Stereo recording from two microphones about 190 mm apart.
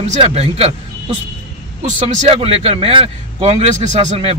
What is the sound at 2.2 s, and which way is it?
A man's voice, 30° right (ahead or behind).